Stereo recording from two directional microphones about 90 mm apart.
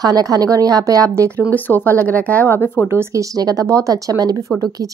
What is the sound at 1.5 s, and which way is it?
Speech, 20° left (ahead or behind).